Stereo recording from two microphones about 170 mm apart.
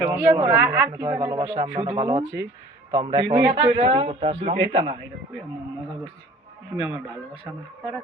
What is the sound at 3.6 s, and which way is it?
A man's voice, 35° right (ahead or behind).